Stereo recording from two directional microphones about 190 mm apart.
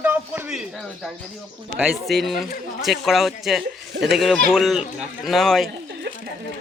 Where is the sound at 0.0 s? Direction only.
10° right (ahead or behind).